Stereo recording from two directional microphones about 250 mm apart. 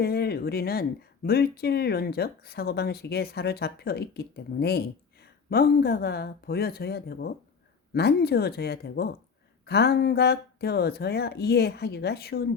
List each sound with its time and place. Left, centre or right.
0.0 s speech: left